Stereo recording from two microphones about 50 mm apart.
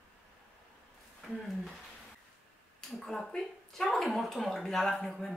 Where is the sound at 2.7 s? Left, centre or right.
Centre.